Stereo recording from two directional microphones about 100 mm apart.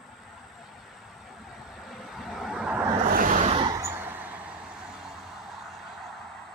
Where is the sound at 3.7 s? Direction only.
25° right (ahead or behind).